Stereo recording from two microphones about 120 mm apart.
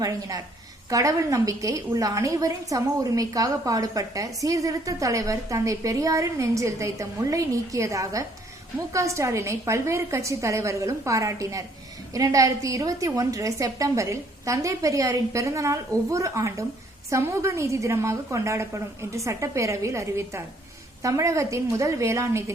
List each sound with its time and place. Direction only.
0.0 s a woman's voice: 30° right (ahead or behind)